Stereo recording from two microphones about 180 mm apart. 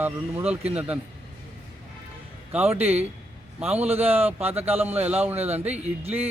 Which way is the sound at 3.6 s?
10° right (ahead or behind).